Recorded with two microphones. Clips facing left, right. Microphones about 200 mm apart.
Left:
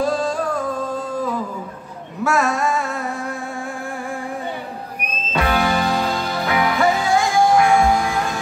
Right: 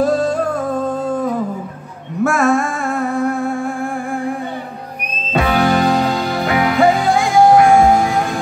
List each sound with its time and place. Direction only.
0.0 s music: 50° right (ahead or behind)
5.3 s music: 50° right (ahead or behind)